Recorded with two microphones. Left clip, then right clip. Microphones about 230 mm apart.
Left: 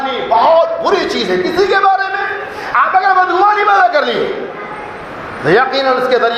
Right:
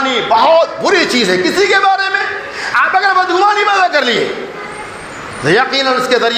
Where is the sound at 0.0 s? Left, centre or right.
Right.